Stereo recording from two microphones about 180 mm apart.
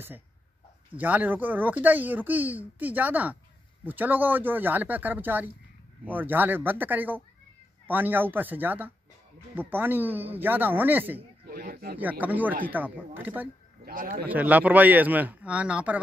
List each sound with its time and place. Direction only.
0.9 s speech: 10° right (ahead or behind)
11.4 s a sound: 55° right (ahead or behind)
12.0 s speech: 10° right (ahead or behind)
13.8 s a man's voice: 55° right (ahead or behind)
14.2 s speech: 10° right (ahead or behind)